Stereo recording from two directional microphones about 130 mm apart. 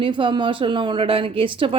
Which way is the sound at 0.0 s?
40° right (ahead or behind).